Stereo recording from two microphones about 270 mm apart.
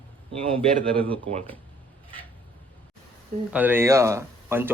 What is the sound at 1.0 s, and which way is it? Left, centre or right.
Speech, centre.